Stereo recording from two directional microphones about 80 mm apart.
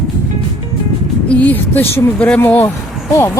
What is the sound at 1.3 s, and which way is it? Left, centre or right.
Speech, left.